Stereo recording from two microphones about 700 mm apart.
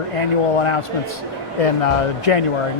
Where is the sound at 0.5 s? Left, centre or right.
Left.